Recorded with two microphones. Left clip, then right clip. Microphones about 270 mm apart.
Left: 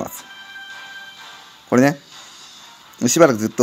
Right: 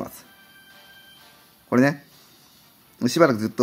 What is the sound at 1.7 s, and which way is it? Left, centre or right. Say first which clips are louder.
Speech: left 4 dB; centre.